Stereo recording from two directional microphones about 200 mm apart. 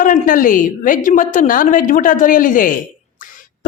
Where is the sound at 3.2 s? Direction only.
40° left (ahead or behind).